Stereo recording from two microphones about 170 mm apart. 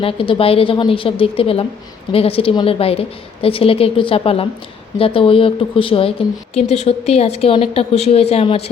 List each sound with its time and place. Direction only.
0.0 s a woman's voice: 35° left (ahead or behind)